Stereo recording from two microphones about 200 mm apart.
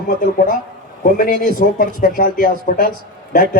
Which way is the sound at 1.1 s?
45° left (ahead or behind).